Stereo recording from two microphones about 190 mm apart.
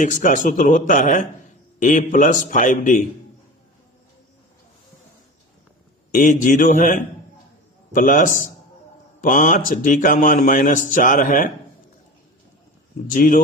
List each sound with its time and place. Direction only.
0.0 s speech: 45° left (ahead or behind)
6.1 s speech: 45° left (ahead or behind)
13.1 s speech: 45° left (ahead or behind)